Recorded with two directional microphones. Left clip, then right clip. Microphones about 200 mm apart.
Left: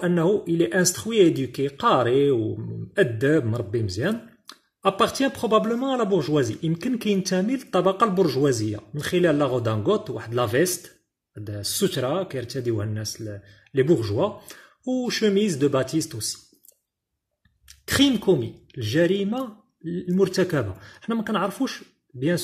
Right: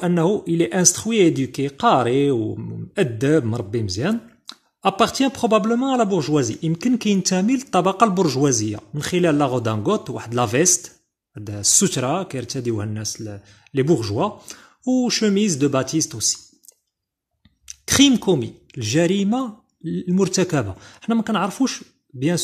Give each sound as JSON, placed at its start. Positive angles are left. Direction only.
{"t": 0.0, "sound": "speech", "side_deg": -35}
{"t": 17.8, "sound": "speech", "side_deg": -30}